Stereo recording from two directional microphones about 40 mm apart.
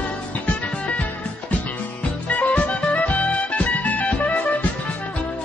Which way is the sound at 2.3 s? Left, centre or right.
Left.